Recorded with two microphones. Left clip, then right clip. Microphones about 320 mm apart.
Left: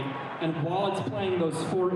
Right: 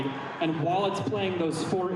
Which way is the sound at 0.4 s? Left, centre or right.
Centre.